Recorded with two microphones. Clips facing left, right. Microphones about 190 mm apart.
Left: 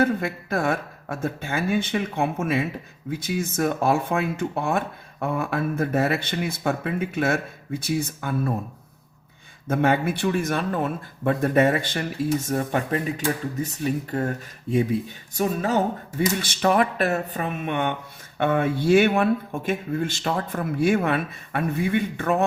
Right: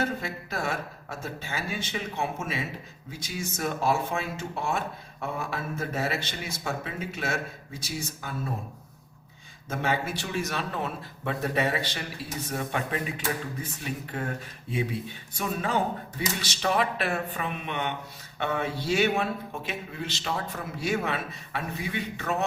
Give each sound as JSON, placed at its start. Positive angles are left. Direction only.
{"t": 0.0, "sound": "speech", "side_deg": 55}
{"t": 9.6, "sound": "speech", "side_deg": 55}